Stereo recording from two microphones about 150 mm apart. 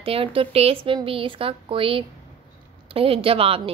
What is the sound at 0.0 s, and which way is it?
A woman's voice, 40° right (ahead or behind).